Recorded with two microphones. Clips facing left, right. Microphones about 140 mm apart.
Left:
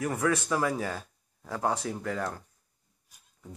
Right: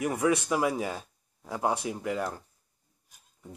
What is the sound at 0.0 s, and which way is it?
Speech, 15° right (ahead or behind).